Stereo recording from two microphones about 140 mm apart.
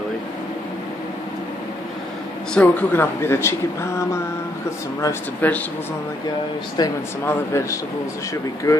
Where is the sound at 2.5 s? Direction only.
10° left (ahead or behind).